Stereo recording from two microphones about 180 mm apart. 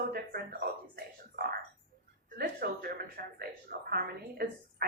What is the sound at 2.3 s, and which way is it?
A woman's voice, 60° right (ahead or behind).